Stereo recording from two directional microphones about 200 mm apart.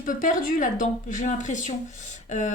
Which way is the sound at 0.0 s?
40° left (ahead or behind).